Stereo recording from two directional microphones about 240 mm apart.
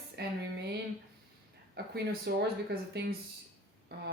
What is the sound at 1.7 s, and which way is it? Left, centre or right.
A woman's voice, right.